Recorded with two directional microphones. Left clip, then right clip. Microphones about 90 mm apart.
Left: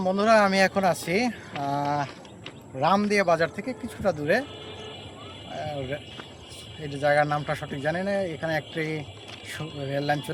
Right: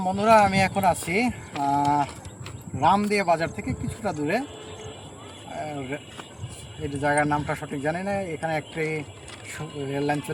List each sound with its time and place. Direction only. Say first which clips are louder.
0.0 s a man's voice: right 2 dB; 40° left (ahead or behind)
5.5 s a sound: even; 35° left (ahead or behind)
6.8 s a man's voice: left 1 dB; 35° left (ahead or behind)
9.9 s a man's voice: even; 35° left (ahead or behind)